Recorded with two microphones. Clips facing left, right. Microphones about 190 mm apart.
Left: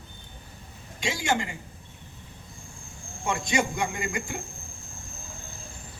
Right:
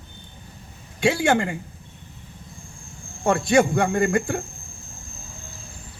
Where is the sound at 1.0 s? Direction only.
55° right (ahead or behind).